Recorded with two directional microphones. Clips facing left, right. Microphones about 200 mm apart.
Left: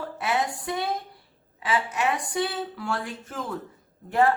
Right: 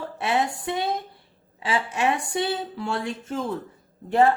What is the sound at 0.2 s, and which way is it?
A woman's voice, 25° right (ahead or behind).